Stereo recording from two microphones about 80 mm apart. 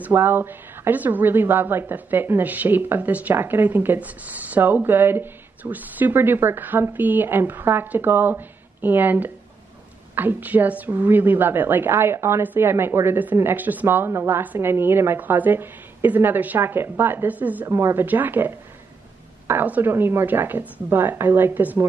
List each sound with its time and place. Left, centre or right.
0.0 s a woman's voice: right
17.6 s a woman's voice: right
18.0 s a woman's voice: right